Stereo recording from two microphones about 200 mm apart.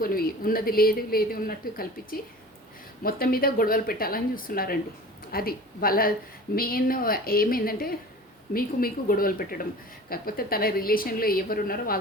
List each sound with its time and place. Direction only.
0.0 s a woman's voice: 45° left (ahead or behind)